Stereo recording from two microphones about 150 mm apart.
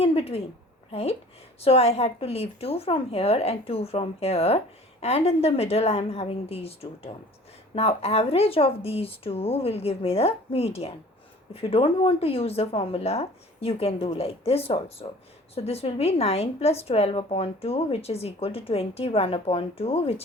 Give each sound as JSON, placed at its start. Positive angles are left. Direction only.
{"t": 0.0, "sound": "a woman's voice", "side_deg": 40}